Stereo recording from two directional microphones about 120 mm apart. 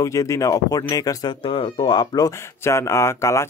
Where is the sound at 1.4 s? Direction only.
45° left (ahead or behind).